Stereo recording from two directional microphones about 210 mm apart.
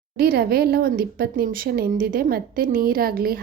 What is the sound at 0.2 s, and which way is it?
A woman's voice, 45° right (ahead or behind).